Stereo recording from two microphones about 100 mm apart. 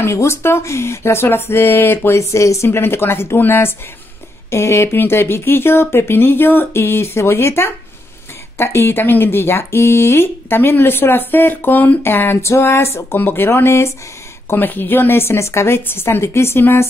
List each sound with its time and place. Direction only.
0.0 s speech: 25° left (ahead or behind)